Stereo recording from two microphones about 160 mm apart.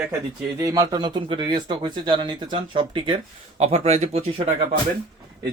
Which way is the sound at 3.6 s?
45° right (ahead or behind).